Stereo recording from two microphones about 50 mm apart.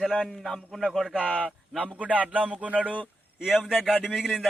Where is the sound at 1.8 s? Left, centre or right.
Right.